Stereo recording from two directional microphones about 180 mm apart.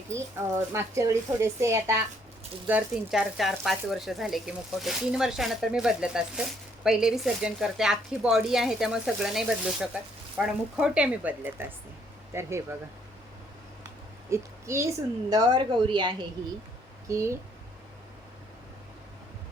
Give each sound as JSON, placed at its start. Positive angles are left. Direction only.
{"t": 0.1, "sound": "speech", "side_deg": -15}
{"t": 14.3, "sound": "a woman's voice", "side_deg": -15}